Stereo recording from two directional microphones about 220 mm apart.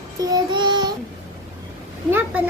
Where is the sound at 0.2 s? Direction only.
20° right (ahead or behind).